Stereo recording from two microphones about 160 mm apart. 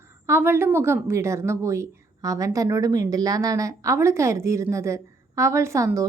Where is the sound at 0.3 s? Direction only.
15° right (ahead or behind).